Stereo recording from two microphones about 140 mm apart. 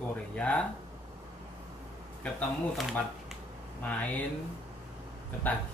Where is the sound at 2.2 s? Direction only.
10° left (ahead or behind).